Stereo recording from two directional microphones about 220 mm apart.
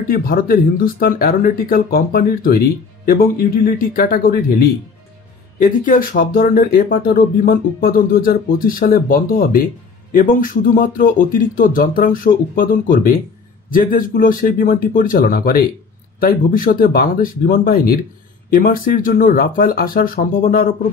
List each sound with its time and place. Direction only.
0.1 s speech: 40° left (ahead or behind)